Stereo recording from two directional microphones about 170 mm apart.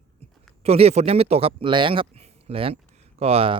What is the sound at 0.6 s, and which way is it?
Speech, 35° right (ahead or behind).